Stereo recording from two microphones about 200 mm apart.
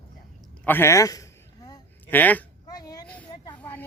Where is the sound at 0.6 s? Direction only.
10° left (ahead or behind).